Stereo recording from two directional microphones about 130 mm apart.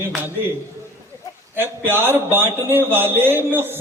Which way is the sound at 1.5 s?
15° right (ahead or behind).